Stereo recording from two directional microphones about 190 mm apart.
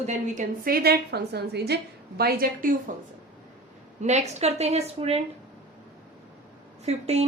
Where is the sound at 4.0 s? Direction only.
35° right (ahead or behind).